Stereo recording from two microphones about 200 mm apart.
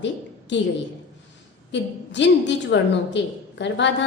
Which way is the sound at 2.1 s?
60° left (ahead or behind).